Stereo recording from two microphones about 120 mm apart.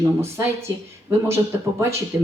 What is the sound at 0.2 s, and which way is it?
Speech, 20° right (ahead or behind).